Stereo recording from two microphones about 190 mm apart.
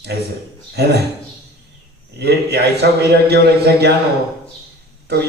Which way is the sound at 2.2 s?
60° right (ahead or behind).